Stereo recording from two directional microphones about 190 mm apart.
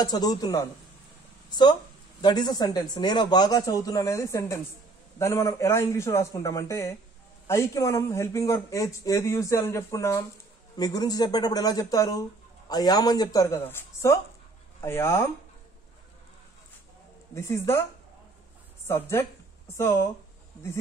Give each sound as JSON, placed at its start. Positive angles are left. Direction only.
{"t": 0.0, "sound": "speech", "side_deg": 20}
{"t": 17.3, "sound": "speech", "side_deg": 15}
{"t": 18.9, "sound": "speech", "side_deg": 15}